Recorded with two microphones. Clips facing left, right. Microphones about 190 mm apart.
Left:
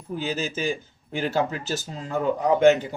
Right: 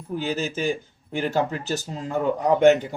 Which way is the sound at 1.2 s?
15° right (ahead or behind).